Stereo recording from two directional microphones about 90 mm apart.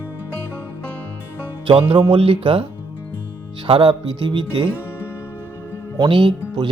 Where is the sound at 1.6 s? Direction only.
85° right.